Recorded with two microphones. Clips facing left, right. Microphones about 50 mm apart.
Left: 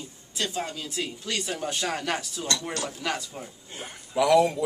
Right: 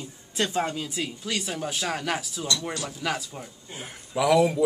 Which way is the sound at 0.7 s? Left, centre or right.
Centre.